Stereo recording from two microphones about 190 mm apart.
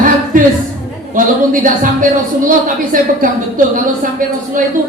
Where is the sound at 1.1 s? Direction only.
45° right (ahead or behind).